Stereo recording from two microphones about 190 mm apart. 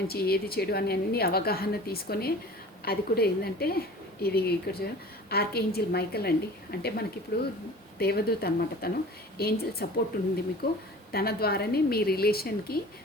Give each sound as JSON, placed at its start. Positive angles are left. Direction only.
{"t": 0.1, "sound": "a woman's voice", "side_deg": 55}